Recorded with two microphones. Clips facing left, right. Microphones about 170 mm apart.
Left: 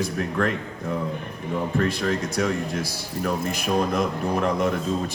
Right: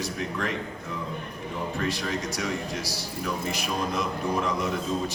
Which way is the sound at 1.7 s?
50° left (ahead or behind).